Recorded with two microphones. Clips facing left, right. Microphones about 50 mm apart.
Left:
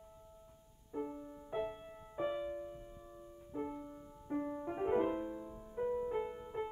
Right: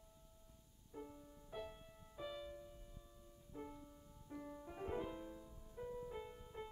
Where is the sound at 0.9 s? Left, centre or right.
Left.